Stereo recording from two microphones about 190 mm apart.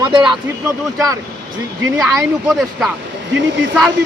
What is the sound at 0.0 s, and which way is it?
Speech, 25° right (ahead or behind).